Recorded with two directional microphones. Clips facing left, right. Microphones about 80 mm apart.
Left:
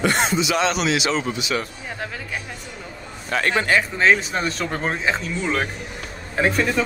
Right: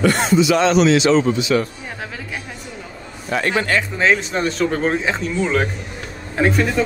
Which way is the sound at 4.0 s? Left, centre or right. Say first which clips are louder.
Right 1 dB; centre.